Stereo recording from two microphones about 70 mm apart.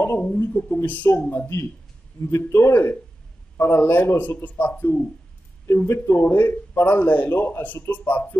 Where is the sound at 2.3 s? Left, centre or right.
Left.